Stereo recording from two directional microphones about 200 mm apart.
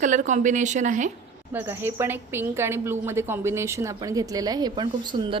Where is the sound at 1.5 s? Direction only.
10° right (ahead or behind).